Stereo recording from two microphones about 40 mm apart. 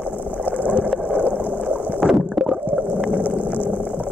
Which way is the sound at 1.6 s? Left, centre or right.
Centre.